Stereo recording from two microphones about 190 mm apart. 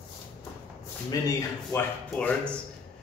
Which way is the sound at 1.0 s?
20° left (ahead or behind).